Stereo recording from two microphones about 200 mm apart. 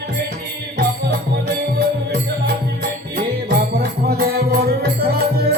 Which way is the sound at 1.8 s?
55° right (ahead or behind).